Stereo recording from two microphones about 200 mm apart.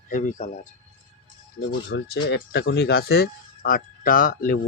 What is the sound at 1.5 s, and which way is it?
Speech, 55° left (ahead or behind).